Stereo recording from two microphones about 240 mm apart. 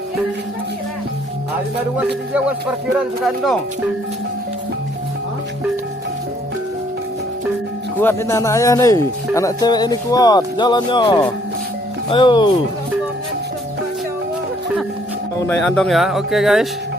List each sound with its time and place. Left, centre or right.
3.0 s speech: centre
7.9 s speech: centre
15.4 s speech: centre